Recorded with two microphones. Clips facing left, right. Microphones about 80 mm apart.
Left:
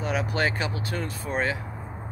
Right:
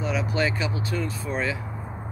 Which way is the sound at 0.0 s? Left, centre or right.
Left.